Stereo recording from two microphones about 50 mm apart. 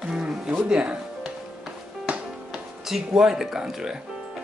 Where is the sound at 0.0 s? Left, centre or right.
Centre.